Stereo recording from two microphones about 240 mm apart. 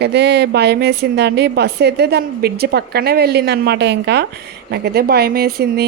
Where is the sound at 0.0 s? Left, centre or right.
Right.